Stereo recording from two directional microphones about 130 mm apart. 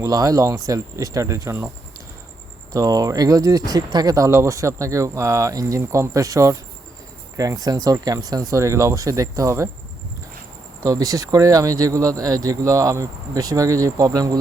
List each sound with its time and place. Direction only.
0.0 s speech: 25° right (ahead or behind)
2.7 s speech: 25° right (ahead or behind)
10.8 s speech: 25° right (ahead or behind)